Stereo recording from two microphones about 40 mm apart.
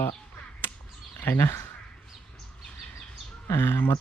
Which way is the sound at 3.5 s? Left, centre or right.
Left.